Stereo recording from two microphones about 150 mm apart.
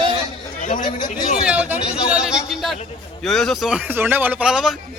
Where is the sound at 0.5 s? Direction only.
60° left (ahead or behind).